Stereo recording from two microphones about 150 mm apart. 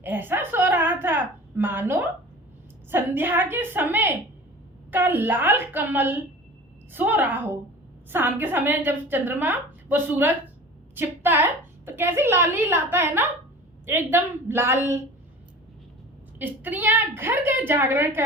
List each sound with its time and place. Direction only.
0.0 s a sound: 15° right (ahead or behind)
2.9 s a woman's voice: 15° right (ahead or behind)
16.4 s a woman's voice: 10° right (ahead or behind)